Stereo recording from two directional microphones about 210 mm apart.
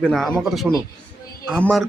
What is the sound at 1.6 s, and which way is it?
Speech, centre (ahead or behind).